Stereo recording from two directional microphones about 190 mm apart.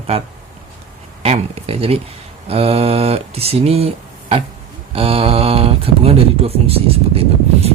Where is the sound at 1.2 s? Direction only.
30° right (ahead or behind).